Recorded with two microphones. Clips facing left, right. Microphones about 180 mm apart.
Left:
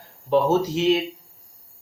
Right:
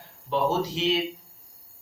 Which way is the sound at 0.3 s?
45° left (ahead or behind).